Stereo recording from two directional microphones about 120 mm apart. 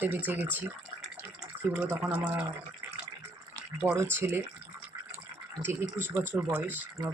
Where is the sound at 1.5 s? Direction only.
50° right (ahead or behind).